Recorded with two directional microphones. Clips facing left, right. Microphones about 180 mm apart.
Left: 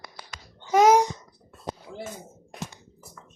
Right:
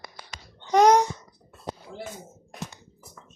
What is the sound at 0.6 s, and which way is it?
Babbling, 5° left (ahead or behind).